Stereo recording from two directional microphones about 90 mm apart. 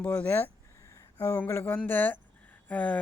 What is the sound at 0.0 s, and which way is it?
Speech, 15° left (ahead or behind).